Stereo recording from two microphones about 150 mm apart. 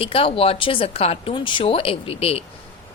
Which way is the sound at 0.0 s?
40° left (ahead or behind).